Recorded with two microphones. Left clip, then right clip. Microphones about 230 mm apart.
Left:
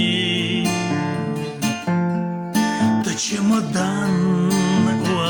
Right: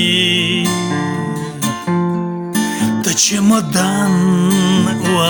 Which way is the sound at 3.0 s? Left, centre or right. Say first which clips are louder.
Right 8 dB; right.